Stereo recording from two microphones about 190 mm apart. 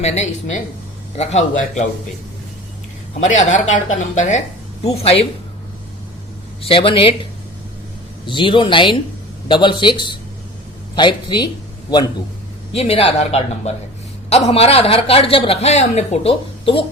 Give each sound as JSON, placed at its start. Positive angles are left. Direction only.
{"t": 0.0, "sound": "a woman's voice", "side_deg": 35}
{"t": 3.2, "sound": "a woman's voice", "side_deg": 40}
{"t": 6.6, "sound": "a man's voice", "side_deg": 30}
{"t": 8.3, "sound": "a man's voice", "side_deg": 25}